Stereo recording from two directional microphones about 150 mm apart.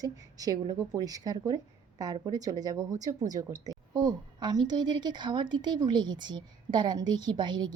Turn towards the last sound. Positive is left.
turn(degrees=-30)  # may be behind; listen again after turning